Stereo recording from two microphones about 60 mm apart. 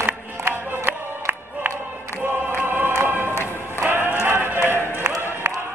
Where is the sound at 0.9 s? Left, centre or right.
Right.